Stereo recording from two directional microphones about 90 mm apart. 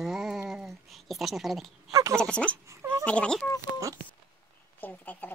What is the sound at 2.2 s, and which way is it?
Speech, 10° left (ahead or behind).